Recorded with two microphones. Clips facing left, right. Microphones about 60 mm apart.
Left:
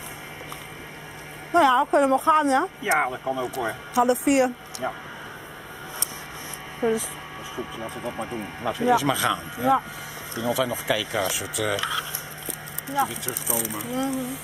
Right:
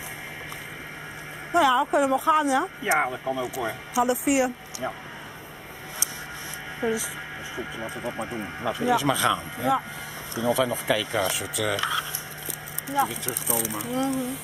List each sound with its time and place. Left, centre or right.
1.5 s speech: centre
6.8 s speech: centre